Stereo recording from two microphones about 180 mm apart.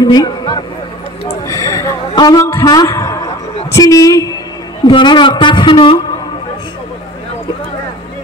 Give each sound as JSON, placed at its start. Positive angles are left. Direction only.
{"t": 0.0, "sound": "speech", "side_deg": 20}
{"t": 1.5, "sound": "a sound", "side_deg": 15}
{"t": 3.7, "sound": "a man's voice", "side_deg": 20}